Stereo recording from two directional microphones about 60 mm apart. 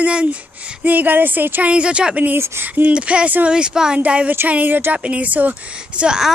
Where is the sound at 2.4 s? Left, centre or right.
Right.